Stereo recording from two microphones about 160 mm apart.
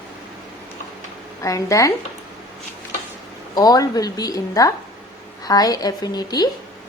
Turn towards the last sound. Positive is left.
turn(degrees=25)  # may be behind; listen again after turning